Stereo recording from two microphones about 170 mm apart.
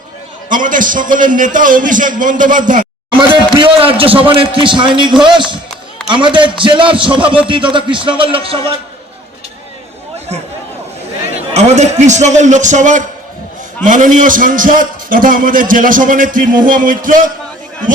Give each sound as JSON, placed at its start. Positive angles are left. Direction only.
{"t": 0.5, "sound": "a man's voice", "side_deg": -50}
{"t": 3.6, "sound": "a man's voice", "side_deg": -30}
{"t": 7.2, "sound": "speech", "side_deg": -5}
{"t": 7.4, "sound": "a man's voice", "side_deg": -30}
{"t": 11.5, "sound": "a man's voice", "side_deg": -40}